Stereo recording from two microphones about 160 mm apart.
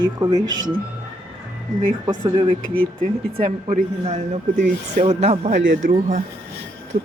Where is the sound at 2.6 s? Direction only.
60° right (ahead or behind).